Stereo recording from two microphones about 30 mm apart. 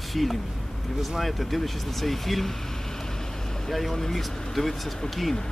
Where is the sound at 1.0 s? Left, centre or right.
Centre.